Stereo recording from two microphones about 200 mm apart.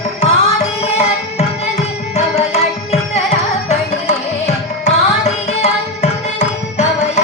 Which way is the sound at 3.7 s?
35° left (ahead or behind).